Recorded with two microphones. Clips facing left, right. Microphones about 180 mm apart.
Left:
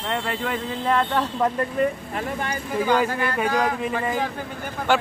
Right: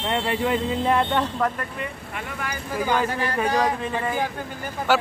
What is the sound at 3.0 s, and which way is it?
Speech, 10° left (ahead or behind).